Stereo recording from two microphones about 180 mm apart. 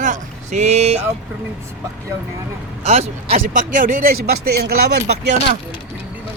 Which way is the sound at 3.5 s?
45° right (ahead or behind).